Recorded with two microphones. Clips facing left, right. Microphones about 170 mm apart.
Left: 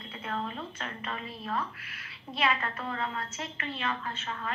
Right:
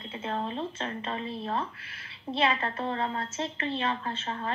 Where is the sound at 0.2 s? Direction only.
25° right (ahead or behind).